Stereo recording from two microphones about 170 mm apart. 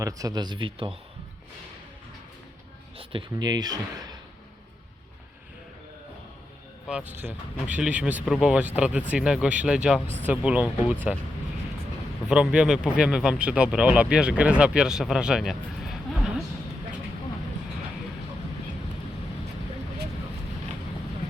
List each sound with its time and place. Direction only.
0.0 s speech: 20° right (ahead or behind)
3.0 s speech: 30° right (ahead or behind)
6.8 s speech: 5° right (ahead or behind)
12.3 s speech: 5° right (ahead or behind)